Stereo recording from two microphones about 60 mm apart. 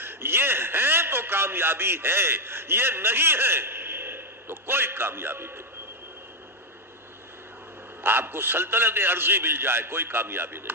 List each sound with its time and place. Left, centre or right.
0.0 s a man's voice: right
8.0 s a man's voice: right